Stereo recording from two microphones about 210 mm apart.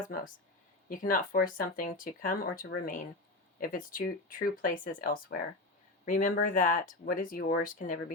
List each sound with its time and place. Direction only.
0.9 s speech: 40° left (ahead or behind)